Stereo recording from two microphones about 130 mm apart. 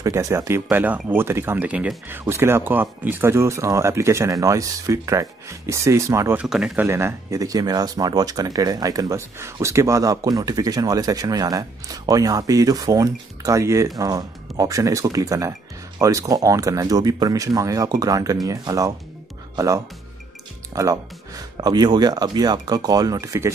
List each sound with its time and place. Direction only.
0.0 s speech: 25° right (ahead or behind)
6.4 s speech: 5° right (ahead or behind)
6.9 s speech: 20° right (ahead or behind)